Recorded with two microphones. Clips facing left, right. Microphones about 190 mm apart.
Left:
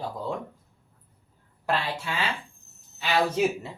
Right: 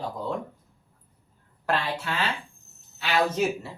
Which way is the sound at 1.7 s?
10° left (ahead or behind).